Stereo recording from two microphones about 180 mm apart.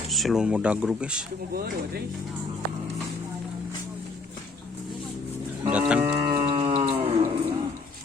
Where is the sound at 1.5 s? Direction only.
60° right (ahead or behind).